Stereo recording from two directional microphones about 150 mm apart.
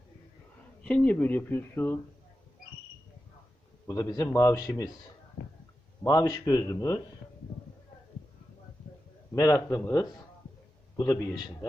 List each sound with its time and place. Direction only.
0.9 s speech: 10° left (ahead or behind)
3.8 s a man's voice: 20° left (ahead or behind)
6.0 s a man's voice: 25° left (ahead or behind)
9.3 s a man's voice: 20° left (ahead or behind)